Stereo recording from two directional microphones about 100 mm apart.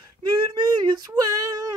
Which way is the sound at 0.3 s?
50° right (ahead or behind).